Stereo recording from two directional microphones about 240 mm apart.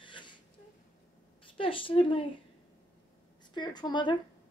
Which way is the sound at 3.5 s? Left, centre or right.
Centre.